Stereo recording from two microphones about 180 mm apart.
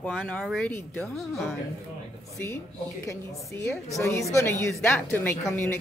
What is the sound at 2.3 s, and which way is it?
Speech, 15° left (ahead or behind).